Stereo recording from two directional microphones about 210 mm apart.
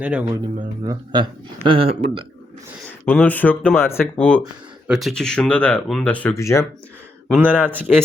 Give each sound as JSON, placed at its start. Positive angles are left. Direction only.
{"t": 0.0, "sound": "speech", "side_deg": -5}
{"t": 0.9, "sound": "speech", "side_deg": -20}
{"t": 3.1, "sound": "speech", "side_deg": 5}
{"t": 7.3, "sound": "a man's voice", "side_deg": 0}